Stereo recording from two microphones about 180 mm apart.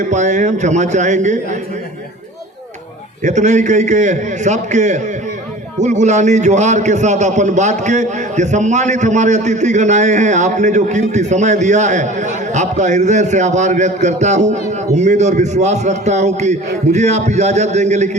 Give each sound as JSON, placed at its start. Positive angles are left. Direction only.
{"t": 0.0, "sound": "a man's voice", "side_deg": -40}
{"t": 3.2, "sound": "a man's voice", "side_deg": -40}